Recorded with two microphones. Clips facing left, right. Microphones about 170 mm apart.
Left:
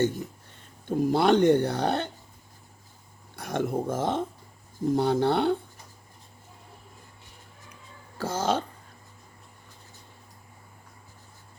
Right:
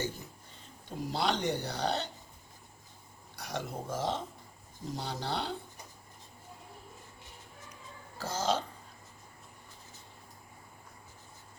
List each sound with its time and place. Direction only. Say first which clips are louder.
0.9 s speech: left 11 dB; 50° left (ahead or behind)
3.3 s speech: left 10 dB; 55° left (ahead or behind)
8.2 s speech: left 5 dB; 55° left (ahead or behind)